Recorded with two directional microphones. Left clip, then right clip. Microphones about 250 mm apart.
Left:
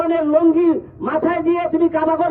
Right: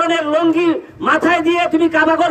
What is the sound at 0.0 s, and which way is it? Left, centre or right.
A man's voice, centre.